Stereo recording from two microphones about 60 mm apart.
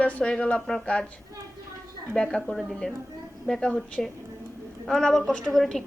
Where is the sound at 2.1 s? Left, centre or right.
Centre.